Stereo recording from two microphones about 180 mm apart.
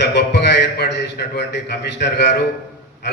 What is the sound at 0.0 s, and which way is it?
A man's voice, 70° left (ahead or behind).